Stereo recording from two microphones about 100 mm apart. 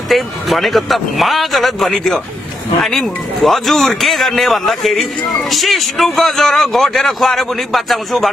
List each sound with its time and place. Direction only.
0.1 s a man's voice: centre (ahead or behind)